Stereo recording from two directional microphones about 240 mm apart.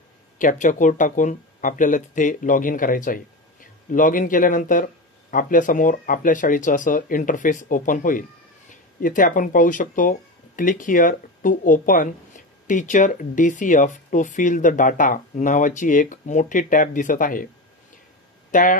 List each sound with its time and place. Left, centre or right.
0.4 s speech: left
18.5 s speech: left